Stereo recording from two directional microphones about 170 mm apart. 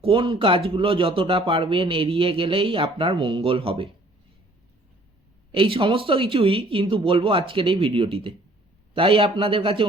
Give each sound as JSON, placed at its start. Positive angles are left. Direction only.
{"t": 0.0, "sound": "a man's voice", "side_deg": -35}
{"t": 5.5, "sound": "a man's voice", "side_deg": -30}